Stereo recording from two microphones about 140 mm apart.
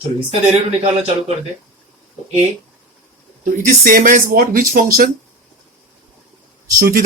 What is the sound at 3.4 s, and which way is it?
Speech, 70° right (ahead or behind).